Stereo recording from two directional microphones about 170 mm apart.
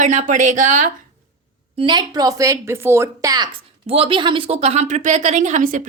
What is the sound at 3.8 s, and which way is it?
A woman's voice, 35° right (ahead or behind).